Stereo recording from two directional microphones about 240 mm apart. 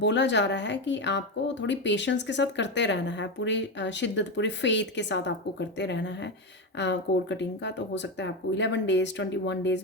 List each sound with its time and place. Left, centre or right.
0.0 s speech: left